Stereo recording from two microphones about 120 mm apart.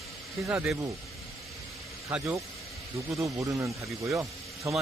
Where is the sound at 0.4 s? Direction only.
15° right (ahead or behind).